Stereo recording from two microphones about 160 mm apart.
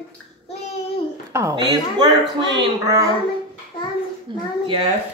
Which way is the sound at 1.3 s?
20° right (ahead or behind).